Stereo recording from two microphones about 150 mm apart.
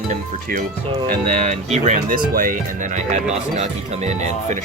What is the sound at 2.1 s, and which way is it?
Speech, 65° right (ahead or behind).